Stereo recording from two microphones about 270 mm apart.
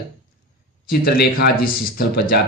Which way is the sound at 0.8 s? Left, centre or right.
Left.